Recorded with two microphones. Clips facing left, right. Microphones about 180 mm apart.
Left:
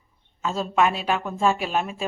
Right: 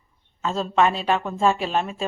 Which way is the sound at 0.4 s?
5° left (ahead or behind).